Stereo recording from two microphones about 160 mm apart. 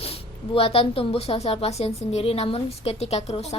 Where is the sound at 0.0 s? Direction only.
35° left (ahead or behind).